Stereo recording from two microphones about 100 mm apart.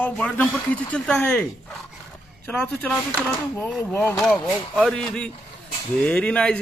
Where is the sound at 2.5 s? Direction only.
15° left (ahead or behind).